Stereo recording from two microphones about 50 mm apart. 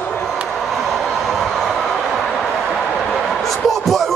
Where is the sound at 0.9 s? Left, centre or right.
Centre.